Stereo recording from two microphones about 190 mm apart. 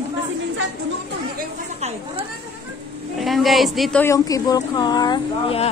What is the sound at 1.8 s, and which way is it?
Speech, 35° right (ahead or behind).